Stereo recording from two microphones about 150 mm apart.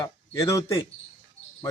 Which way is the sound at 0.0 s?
20° left (ahead or behind).